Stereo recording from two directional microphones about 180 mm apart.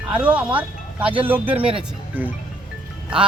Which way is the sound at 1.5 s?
30° right (ahead or behind).